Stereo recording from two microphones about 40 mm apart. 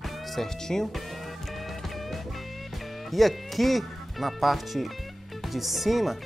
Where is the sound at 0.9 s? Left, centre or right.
Centre.